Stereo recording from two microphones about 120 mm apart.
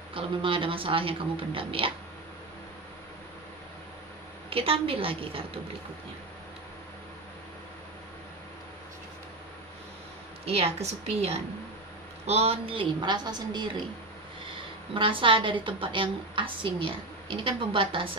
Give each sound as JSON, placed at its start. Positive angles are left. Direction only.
{"t": 0.1, "sound": "a woman's voice", "side_deg": -45}
{"t": 4.5, "sound": "a woman's voice", "side_deg": -50}
{"t": 10.4, "sound": "a woman's voice", "side_deg": -60}
{"t": 15.0, "sound": "a woman's voice", "side_deg": -45}